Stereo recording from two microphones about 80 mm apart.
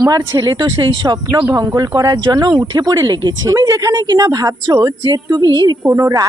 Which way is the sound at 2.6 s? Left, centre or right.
Right.